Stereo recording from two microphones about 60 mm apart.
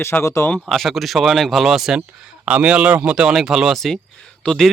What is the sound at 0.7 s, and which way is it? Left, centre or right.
Speech, centre.